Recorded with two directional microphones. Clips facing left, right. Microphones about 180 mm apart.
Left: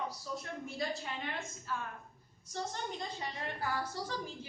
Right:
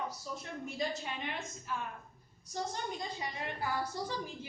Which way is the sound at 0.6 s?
20° right (ahead or behind).